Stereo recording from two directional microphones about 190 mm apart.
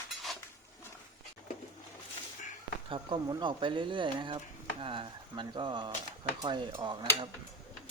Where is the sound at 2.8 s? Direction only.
25° right (ahead or behind).